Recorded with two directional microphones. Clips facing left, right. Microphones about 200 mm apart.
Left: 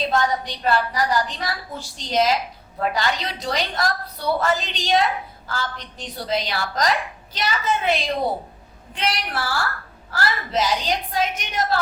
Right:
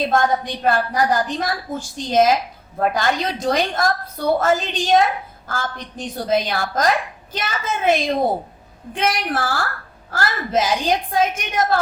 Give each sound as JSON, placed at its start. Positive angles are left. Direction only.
{"t": 0.1, "sound": "a woman's voice", "side_deg": -50}